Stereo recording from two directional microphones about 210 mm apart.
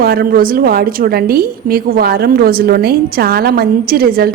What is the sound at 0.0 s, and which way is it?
A woman's voice, 45° right (ahead or behind).